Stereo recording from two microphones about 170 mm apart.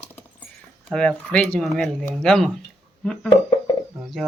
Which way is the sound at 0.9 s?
5° left (ahead or behind).